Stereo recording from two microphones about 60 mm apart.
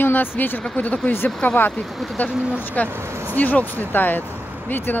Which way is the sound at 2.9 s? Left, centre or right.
Right.